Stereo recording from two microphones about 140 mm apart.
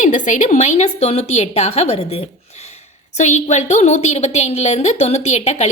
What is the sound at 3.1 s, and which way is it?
A woman's voice, 55° left (ahead or behind).